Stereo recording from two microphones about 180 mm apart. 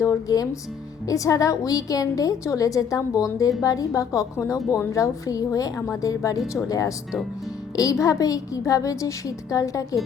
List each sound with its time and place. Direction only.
0.0 s a woman's voice: 20° left (ahead or behind)